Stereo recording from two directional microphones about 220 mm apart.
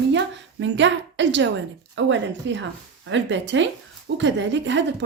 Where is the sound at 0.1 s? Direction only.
55° right (ahead or behind).